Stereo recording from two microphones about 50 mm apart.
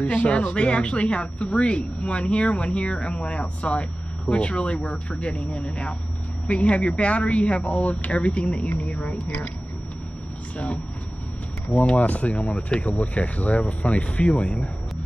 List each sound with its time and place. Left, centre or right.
0.0 s speech: left
11.7 s speech: left